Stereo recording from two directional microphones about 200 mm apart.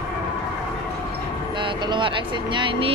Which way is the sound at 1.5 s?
25° right (ahead or behind).